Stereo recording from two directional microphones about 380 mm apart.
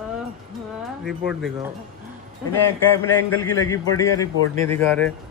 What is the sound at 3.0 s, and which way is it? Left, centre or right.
A man's voice, centre.